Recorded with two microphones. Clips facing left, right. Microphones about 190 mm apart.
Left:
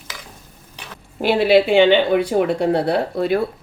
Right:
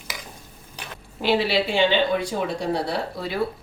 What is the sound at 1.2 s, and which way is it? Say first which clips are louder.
Speech: left 7 dB; 55° left (ahead or behind).